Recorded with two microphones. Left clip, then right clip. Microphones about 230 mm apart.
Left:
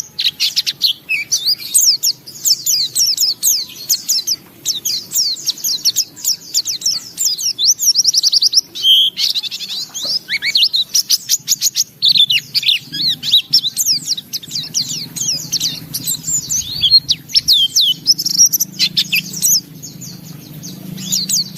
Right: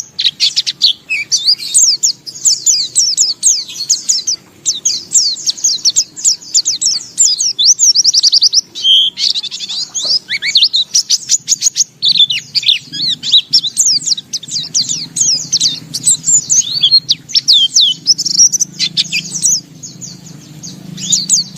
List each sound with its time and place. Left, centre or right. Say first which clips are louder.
0.2 s chirp: right 4 dB; centre
2.5 s bird: right 2 dB; centre
16.8 s chirp: left 1 dB; centre
17.5 s bird: right 4 dB; centre
21.1 s chirp: right 4 dB; centre